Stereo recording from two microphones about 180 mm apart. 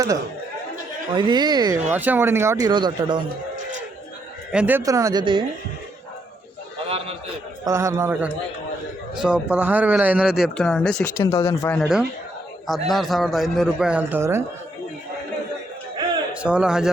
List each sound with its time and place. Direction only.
1.1 s speech: 25° right (ahead or behind)
1.9 s speech: 10° right (ahead or behind); by 3.2 s 25° right (ahead or behind)
4.5 s speech: 10° right (ahead or behind); by 5.5 s 25° right (ahead or behind)
6.8 s a sound: 35° right (ahead or behind)
7.6 s speech: 15° right (ahead or behind)
9.1 s speech: 5° right (ahead or behind)
11.2 s speech: 15° left (ahead or behind)
12.9 s speech: centre (ahead or behind)
16.4 s speech: 5° right (ahead or behind)